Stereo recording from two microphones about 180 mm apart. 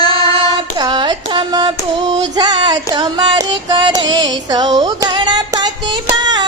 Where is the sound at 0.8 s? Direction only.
25° right (ahead or behind).